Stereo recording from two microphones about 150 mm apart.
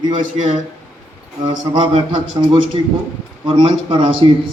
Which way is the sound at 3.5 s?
35° right (ahead or behind).